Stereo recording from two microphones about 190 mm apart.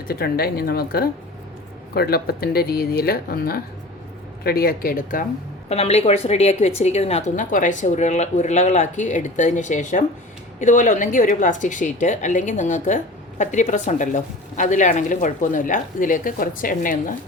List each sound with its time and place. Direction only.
0.1 s speech: 55° left (ahead or behind)
5.6 s a woman's voice: 35° left (ahead or behind)